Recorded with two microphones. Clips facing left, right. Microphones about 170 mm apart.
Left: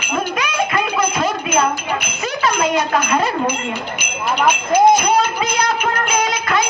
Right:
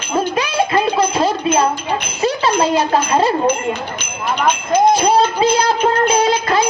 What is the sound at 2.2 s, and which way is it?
Speech, 30° right (ahead or behind).